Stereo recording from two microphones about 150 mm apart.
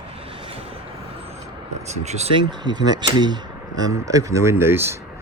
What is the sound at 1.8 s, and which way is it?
Speech, 50° right (ahead or behind).